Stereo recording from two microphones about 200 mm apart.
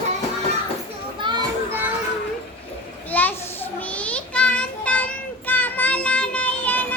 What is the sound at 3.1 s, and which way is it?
Children playing, 10° left (ahead or behind).